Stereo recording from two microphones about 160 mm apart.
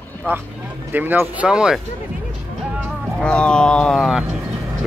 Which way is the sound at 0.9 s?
10° right (ahead or behind).